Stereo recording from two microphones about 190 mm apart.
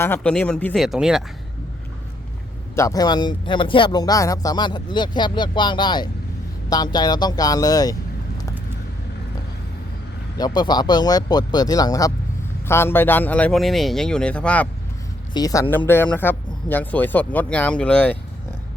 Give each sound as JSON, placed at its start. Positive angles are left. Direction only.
{"t": 0.0, "sound": "speech", "side_deg": 10}
{"t": 2.7, "sound": "speech", "side_deg": 15}
{"t": 10.3, "sound": "speech", "side_deg": 20}
{"t": 15.3, "sound": "speech", "side_deg": 20}